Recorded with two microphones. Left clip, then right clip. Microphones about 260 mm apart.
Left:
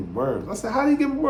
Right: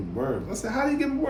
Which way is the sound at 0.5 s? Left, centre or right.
Centre.